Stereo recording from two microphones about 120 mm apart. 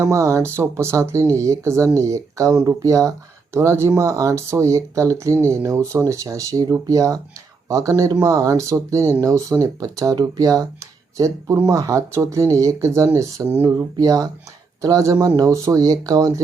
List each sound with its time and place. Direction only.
0.0 s speech: 25° right (ahead or behind)